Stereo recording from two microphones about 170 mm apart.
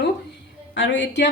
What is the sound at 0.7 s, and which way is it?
Speech, 90° left.